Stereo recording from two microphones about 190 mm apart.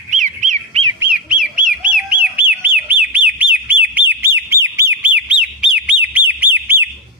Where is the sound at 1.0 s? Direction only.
5° right (ahead or behind).